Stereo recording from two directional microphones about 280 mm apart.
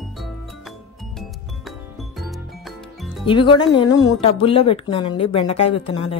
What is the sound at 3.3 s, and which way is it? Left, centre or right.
Speech, centre.